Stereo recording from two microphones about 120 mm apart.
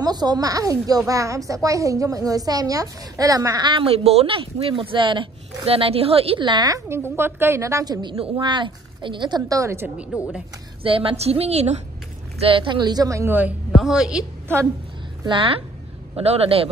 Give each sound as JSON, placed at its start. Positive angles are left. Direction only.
{"t": 0.0, "sound": "a woman's voice", "side_deg": -35}
{"t": 6.4, "sound": "a woman's voice", "side_deg": -35}
{"t": 7.2, "sound": "a woman's voice", "side_deg": -20}
{"t": 10.1, "sound": "a man's voice", "side_deg": -5}
{"t": 10.8, "sound": "a woman's voice", "side_deg": -50}
{"t": 12.4, "sound": "a woman's voice", "side_deg": -45}
{"t": 13.3, "sound": "a man's voice", "side_deg": -15}
{"t": 15.2, "sound": "a woman's voice", "side_deg": -45}